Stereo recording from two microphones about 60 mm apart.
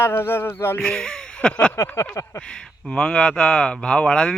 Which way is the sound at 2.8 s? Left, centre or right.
Centre.